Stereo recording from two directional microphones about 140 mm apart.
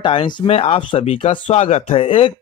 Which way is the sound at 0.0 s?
35° left (ahead or behind).